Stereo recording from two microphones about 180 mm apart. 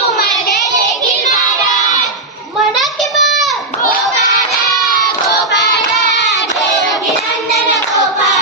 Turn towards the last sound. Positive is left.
turn(degrees=0)  # may be behind; listen again after turning